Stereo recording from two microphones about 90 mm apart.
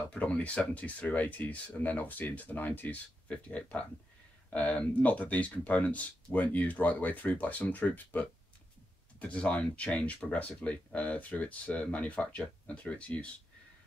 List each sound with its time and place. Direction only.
0.1 s speech: 15° left (ahead or behind)